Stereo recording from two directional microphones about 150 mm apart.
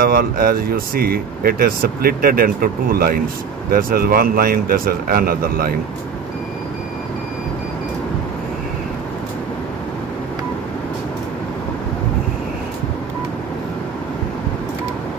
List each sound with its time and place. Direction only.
0.0 s speech: 85° right